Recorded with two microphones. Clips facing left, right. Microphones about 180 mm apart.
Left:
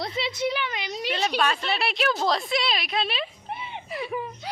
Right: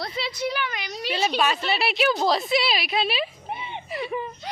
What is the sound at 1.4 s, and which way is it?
Speech, 5° right (ahead or behind).